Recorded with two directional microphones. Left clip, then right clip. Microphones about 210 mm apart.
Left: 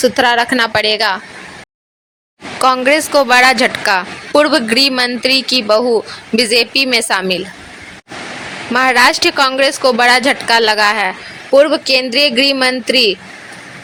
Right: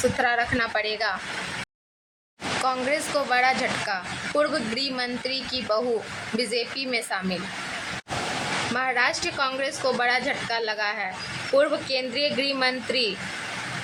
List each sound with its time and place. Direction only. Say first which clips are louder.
0.2 s a woman's voice: left 12 dB; 40° left (ahead or behind)
2.6 s a woman's voice: left 16 dB; 45° left (ahead or behind)
6.9 s a woman's voice: left 14 dB; 50° left (ahead or behind)
8.7 s a woman's voice: left 16 dB; 50° left (ahead or behind)